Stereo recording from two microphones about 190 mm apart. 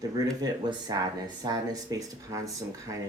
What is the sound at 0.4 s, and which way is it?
Speech, 20° right (ahead or behind).